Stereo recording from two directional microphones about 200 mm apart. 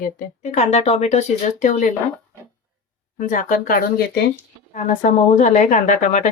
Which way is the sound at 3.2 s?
40° left (ahead or behind).